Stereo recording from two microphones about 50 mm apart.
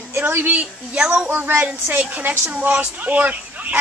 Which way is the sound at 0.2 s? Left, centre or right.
Right.